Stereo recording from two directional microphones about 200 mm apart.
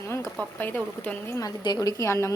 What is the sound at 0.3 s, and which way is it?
A woman's voice, 5° left (ahead or behind).